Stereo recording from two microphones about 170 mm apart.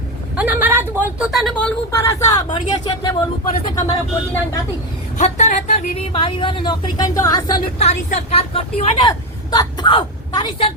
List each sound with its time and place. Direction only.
0.3 s speech: 10° right (ahead or behind); by 3.8 s 20° left (ahead or behind)
5.1 s speech: 45° left (ahead or behind)
6.1 s a woman's voice: 30° left (ahead or behind)
7.8 s a woman's voice: 40° left (ahead or behind)
9.0 s a woman's voice: 25° left (ahead or behind)